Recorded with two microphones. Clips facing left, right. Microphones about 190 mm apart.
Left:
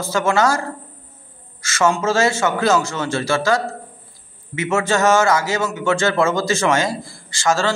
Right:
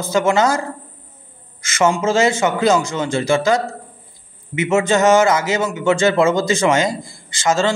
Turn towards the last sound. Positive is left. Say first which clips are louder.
# right 2 dB
turn(degrees=-20)  # may be behind; listen again after turning